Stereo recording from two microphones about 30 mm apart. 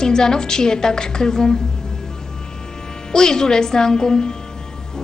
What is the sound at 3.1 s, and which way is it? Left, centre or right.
A woman's voice, left.